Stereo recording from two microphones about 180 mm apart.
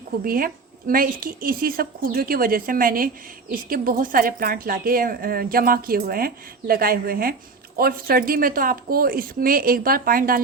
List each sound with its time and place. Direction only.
0.3 s a woman's voice: 55° right (ahead or behind)